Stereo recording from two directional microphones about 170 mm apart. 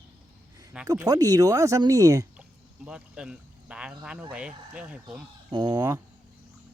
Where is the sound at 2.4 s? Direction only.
5° right (ahead or behind).